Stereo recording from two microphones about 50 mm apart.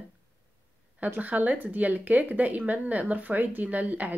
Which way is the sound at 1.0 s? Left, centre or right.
Right.